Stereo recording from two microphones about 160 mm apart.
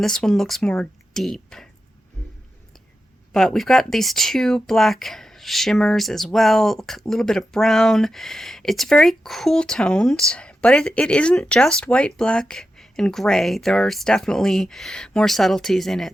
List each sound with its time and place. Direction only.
0.0 s speech: 5° left (ahead or behind)
3.3 s speech: centre (ahead or behind)